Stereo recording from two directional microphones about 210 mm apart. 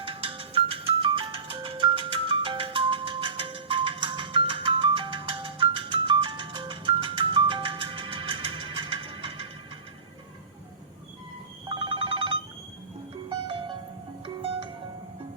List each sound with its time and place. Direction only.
0.0 s music: 25° right (ahead or behind)
11.7 s telephone bell ringing: 25° right (ahead or behind)
13.5 s music: 25° right (ahead or behind)